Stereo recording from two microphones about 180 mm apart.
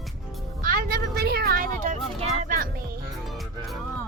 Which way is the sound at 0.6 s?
55° right (ahead or behind).